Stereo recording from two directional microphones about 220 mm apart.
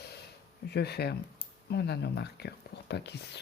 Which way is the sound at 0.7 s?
45° left (ahead or behind).